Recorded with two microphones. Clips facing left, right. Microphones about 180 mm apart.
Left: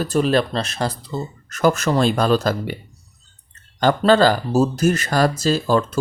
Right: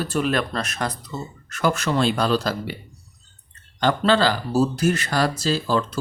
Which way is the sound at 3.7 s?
45° left (ahead or behind).